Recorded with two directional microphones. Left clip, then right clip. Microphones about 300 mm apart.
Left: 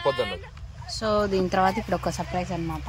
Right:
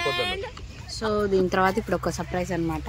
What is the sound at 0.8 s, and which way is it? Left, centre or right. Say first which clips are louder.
Speech: left 1 dB; centre.